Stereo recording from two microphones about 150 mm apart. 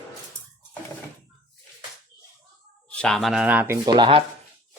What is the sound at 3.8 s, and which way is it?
Speech, 30° right (ahead or behind).